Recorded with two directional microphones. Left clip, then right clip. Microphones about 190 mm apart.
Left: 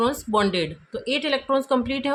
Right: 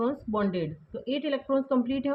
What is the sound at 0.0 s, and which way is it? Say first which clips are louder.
Speech: left 7 dB; 35° left (ahead or behind).